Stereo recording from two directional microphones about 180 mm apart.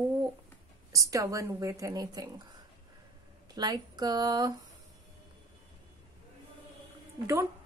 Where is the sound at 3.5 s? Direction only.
20° right (ahead or behind).